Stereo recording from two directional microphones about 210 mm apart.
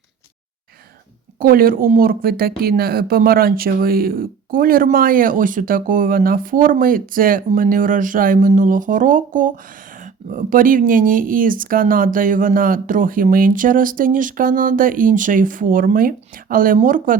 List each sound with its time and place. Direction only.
1.4 s speech: 45° right (ahead or behind)